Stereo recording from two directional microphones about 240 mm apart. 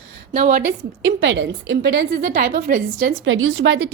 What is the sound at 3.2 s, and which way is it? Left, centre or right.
Speech, right.